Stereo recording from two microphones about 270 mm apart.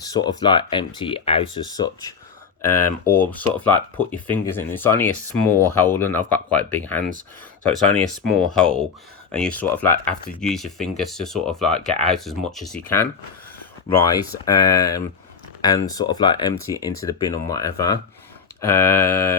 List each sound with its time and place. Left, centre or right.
0.0 s speech: centre